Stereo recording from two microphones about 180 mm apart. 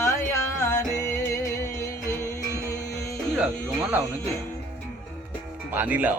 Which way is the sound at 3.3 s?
5° right (ahead or behind).